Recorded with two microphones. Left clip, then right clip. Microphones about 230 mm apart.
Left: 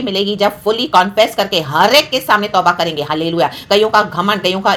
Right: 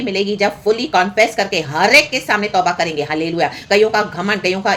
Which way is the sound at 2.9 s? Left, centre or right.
Left.